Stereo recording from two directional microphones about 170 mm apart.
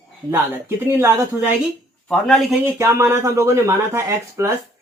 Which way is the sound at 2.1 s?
5° left (ahead or behind).